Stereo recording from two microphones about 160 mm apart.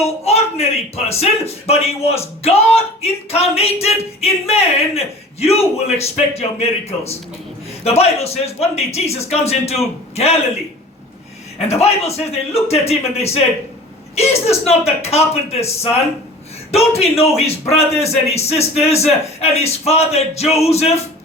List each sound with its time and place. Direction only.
0.0 s speech: 40° left (ahead or behind)
11.7 s speech: 40° left (ahead or behind)